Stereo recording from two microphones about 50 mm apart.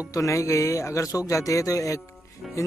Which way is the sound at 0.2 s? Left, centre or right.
Left.